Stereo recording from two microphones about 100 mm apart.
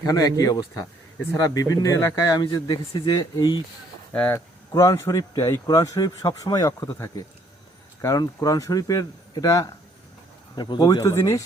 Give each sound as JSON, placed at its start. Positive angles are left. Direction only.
{"t": 0.0, "sound": "speech", "side_deg": 35}
{"t": 4.1, "sound": "speech", "side_deg": 15}
{"t": 4.7, "sound": "speech", "side_deg": 35}
{"t": 8.0, "sound": "speech", "side_deg": 35}